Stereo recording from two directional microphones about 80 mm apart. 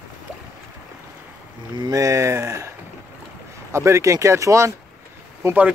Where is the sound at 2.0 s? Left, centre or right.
Right.